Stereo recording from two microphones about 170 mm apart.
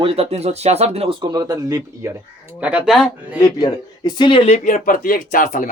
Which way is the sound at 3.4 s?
25° left (ahead or behind).